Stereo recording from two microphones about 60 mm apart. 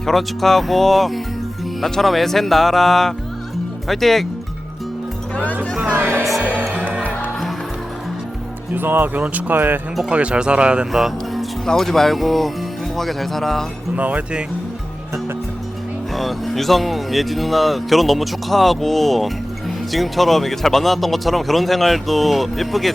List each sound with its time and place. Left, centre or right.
0.0 s speech: centre
5.9 s music: right
8.7 s speech: right
10.1 s speech: centre
10.9 s music: centre
11.6 s speech: centre
13.9 s speech: right
16.1 s speech: centre